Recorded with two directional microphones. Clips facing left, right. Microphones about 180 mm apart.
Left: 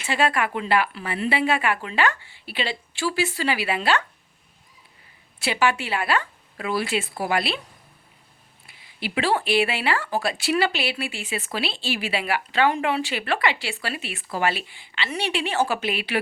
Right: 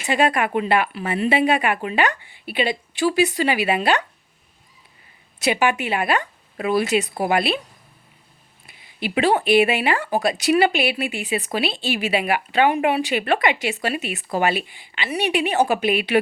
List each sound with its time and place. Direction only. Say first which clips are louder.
0.1 s speech: right 4 dB; 15° right (ahead or behind)
5.4 s speech: right 3 dB; 20° right (ahead or behind)
8.6 s speech: right 4 dB; 20° right (ahead or behind)